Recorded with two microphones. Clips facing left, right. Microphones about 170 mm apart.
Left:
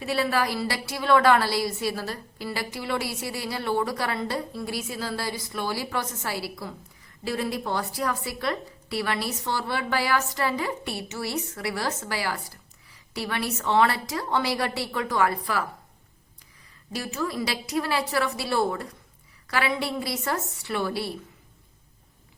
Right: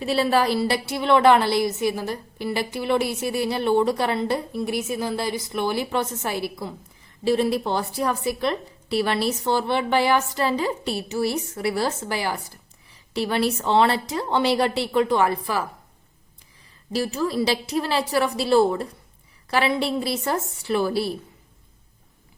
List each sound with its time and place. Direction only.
0.0 s a woman's voice: 30° right (ahead or behind)
16.9 s a woman's voice: 30° right (ahead or behind)